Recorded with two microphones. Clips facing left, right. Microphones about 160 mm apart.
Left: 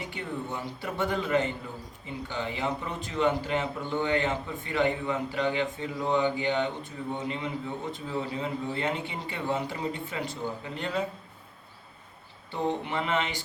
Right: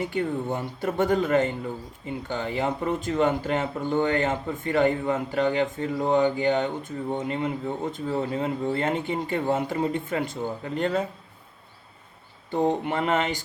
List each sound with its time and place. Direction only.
0.0 s speech: 45° right (ahead or behind)
12.5 s speech: 45° right (ahead or behind)